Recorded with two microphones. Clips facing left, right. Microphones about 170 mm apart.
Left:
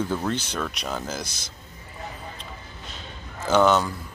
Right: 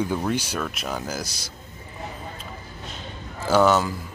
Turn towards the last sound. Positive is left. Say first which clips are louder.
# right 1 dB
turn(degrees=-5)  # may be behind; listen again after turning